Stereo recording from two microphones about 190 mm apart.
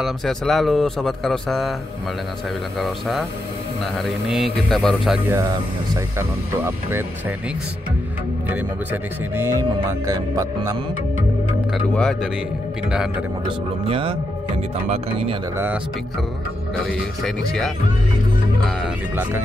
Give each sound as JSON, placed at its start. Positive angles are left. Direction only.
{"t": 0.0, "sound": "speech", "side_deg": 0}
{"t": 2.8, "sound": "speech", "side_deg": 0}
{"t": 5.3, "sound": "speech", "side_deg": -20}
{"t": 8.5, "sound": "speech", "side_deg": -10}
{"t": 11.7, "sound": "speech", "side_deg": 5}
{"t": 13.8, "sound": "speech", "side_deg": -30}
{"t": 15.5, "sound": "speech", "side_deg": -10}
{"t": 17.2, "sound": "speech", "side_deg": 0}
{"t": 18.8, "sound": "speech", "side_deg": -10}